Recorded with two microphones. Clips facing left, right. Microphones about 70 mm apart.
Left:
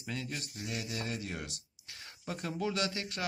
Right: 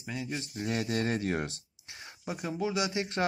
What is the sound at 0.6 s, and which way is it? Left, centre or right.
Speech, right.